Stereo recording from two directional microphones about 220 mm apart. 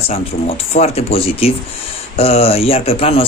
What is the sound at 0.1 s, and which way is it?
Speech, 25° left (ahead or behind).